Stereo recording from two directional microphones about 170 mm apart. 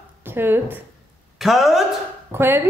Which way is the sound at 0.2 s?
15° right (ahead or behind).